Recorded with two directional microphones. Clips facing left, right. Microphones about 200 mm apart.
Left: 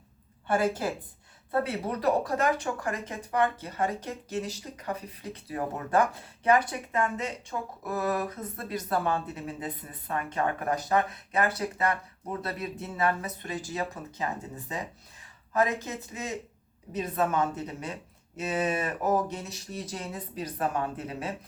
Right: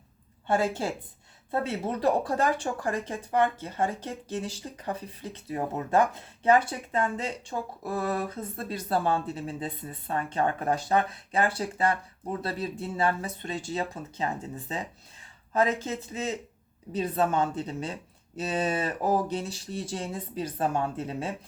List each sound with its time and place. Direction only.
0.4 s speech: 25° right (ahead or behind)
15.5 s speech: 30° right (ahead or behind)